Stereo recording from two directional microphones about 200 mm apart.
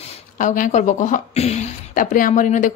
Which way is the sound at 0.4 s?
40° left (ahead or behind).